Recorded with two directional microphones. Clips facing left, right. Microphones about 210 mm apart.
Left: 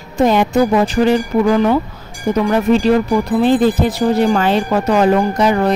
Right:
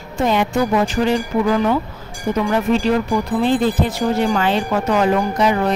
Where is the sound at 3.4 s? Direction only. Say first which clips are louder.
Left 4 dB; 40° left (ahead or behind).